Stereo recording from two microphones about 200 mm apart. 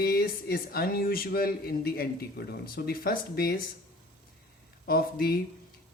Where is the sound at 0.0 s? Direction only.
50° left (ahead or behind).